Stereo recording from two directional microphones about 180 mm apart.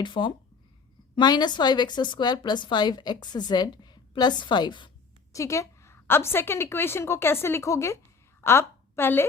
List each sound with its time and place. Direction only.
0.0 s a woman's voice: 25° left (ahead or behind)